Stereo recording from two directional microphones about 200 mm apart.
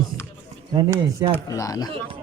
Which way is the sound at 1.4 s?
15° left (ahead or behind).